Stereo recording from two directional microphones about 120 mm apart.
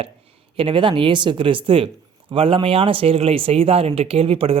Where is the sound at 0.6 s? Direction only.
45° right (ahead or behind).